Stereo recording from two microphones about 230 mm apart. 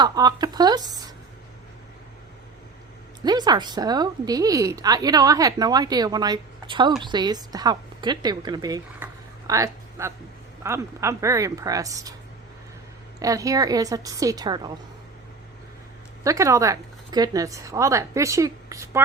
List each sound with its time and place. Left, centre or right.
0.0 s a woman's voice: centre
3.2 s a woman's voice: centre
13.1 s a woman's voice: centre
16.2 s a woman's voice: centre